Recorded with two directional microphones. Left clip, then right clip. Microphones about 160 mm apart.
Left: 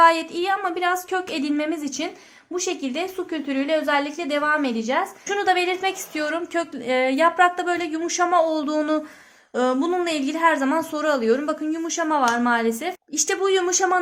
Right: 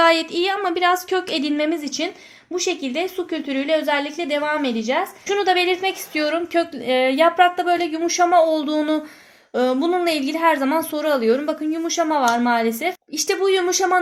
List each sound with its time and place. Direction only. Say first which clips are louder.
0.0 s a woman's voice: even; 55° right (ahead or behind); by 14.0 s 35° right (ahead or behind)